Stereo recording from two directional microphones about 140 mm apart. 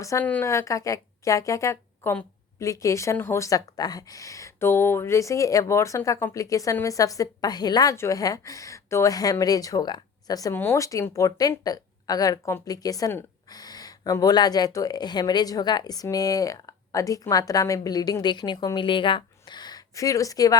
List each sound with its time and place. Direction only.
0.0 s a woman's voice: 20° left (ahead or behind)
10.5 s a woman's voice: 15° left (ahead or behind)